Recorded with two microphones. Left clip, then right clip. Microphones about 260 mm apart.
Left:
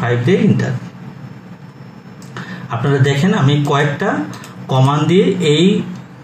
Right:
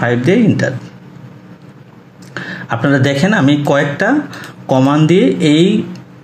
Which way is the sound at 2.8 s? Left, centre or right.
Right.